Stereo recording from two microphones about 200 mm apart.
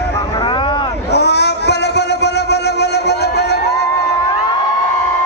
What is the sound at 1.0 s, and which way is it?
Music, 55° left (ahead or behind).